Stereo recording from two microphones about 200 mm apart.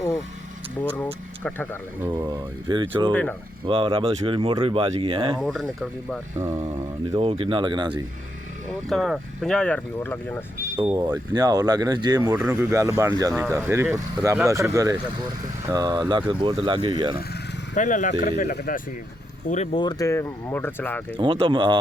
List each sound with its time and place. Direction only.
0.8 s speech: 5° left (ahead or behind)
2.0 s speech: 20° right (ahead or behind)
3.1 s speech: 10° left (ahead or behind)
3.7 s speech: 25° right (ahead or behind)
5.4 s speech: centre (ahead or behind)
6.3 s speech: 15° right (ahead or behind)
7.1 s speech: 30° right (ahead or behind)
8.9 s speech: centre (ahead or behind)
11.3 s speech: 20° right (ahead or behind)
17.2 s vehicle: 45° left (ahead or behind)
18.1 s speech: 50° left (ahead or behind); by 19.8 s 35° left (ahead or behind)
19.8 s speech: 20° left (ahead or behind)
21.2 s speech: 25° right (ahead or behind)